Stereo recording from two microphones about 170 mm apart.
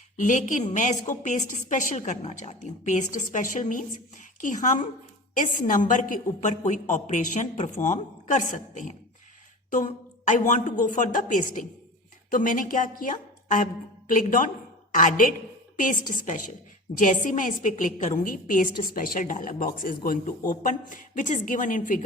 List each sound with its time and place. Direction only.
0.2 s a woman's voice: 45° left (ahead or behind)